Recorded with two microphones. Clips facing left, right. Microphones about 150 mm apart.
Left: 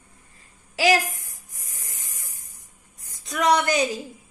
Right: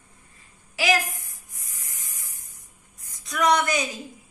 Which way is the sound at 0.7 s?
35° left (ahead or behind).